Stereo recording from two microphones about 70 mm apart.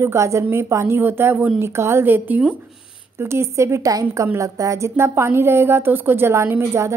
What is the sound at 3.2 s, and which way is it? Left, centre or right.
A woman's voice, right.